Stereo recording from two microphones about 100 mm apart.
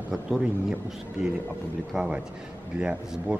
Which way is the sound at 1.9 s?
5° right (ahead or behind).